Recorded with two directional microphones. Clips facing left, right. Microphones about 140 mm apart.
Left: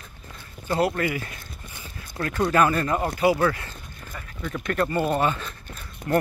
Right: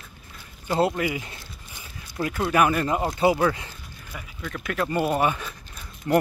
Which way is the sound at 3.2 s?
20° right (ahead or behind).